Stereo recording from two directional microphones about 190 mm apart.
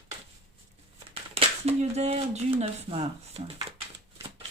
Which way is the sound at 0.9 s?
30° right (ahead or behind).